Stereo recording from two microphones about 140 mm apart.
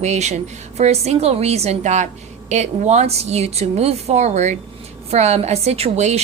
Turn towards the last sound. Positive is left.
turn(degrees=-50)  # may be behind; listen again after turning